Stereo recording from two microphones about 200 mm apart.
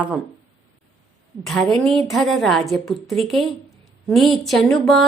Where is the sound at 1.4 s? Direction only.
Centre (ahead or behind).